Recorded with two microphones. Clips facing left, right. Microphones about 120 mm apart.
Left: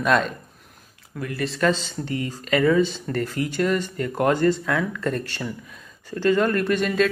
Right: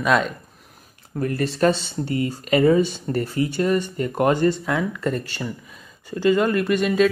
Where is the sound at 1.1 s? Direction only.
35° right (ahead or behind).